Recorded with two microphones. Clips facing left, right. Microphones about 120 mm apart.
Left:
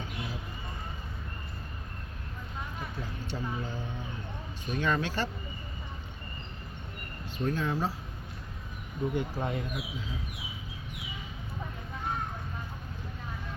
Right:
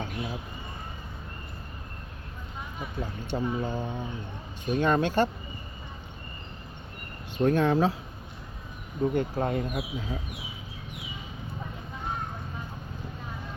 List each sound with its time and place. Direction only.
3.0 s speech: 55° right (ahead or behind)
7.3 s speech: 65° right (ahead or behind)
9.0 s speech: 40° right (ahead or behind)